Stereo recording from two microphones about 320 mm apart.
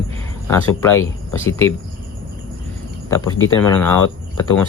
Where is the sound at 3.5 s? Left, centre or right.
Centre.